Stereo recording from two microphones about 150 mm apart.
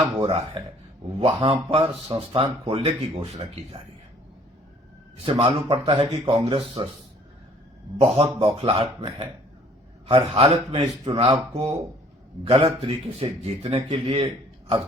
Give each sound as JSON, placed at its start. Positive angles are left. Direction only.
{"t": 0.2, "sound": "speech", "side_deg": -40}
{"t": 5.1, "sound": "speech", "side_deg": -40}
{"t": 7.9, "sound": "speech", "side_deg": -40}